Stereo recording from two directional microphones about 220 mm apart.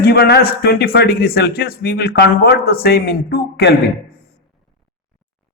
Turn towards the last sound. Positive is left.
turn(degrees=45)  # may be behind; listen again after turning